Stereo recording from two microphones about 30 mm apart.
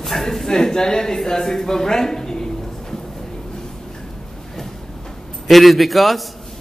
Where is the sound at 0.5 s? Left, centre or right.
Left.